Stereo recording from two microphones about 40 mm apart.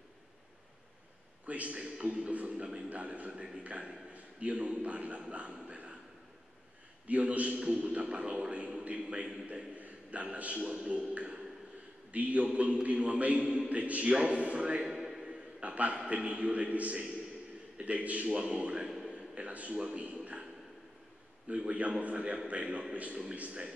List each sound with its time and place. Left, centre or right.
1.4 s a man's voice: right
5.7 s a sound: right
7.1 s a man's voice: right
10.6 s a man's voice: right
15.2 s a sound: right
16.1 s a man's voice: right
19.0 s a sound: right
19.7 s speech: centre
21.5 s a man's voice: right